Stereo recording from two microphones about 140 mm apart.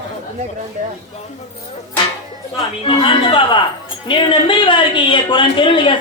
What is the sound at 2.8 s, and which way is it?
A man's voice, 40° left (ahead or behind).